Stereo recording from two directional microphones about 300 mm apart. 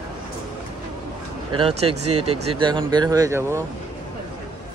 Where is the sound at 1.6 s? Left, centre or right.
Centre.